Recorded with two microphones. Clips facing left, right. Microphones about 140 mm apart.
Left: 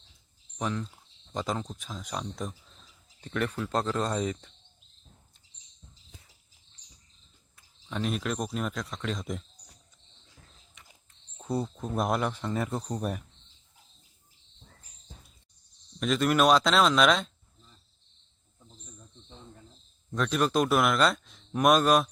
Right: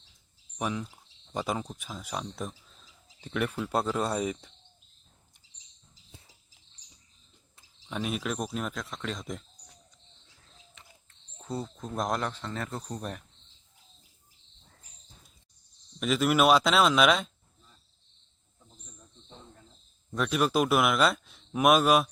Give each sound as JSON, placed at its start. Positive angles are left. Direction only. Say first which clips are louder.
{"t": 0.6, "sound": "speech", "louder": "even", "side_deg": -10}
{"t": 6.1, "sound": "cricket", "louder": "right 3 dB", "side_deg": -25}
{"t": 7.9, "sound": "speech", "louder": "left 1 dB", "side_deg": -5}
{"t": 11.3, "sound": "speech", "louder": "left 4 dB", "side_deg": 10}
{"t": 16.0, "sound": "speech", "louder": "even", "side_deg": -5}
{"t": 20.1, "sound": "speech", "louder": "even", "side_deg": -5}